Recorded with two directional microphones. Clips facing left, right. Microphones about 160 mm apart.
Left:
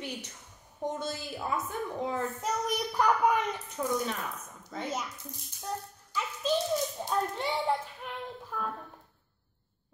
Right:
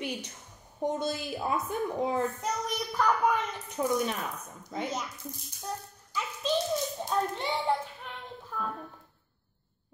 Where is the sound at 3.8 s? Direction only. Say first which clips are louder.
Right 3 dB; 25° right (ahead or behind).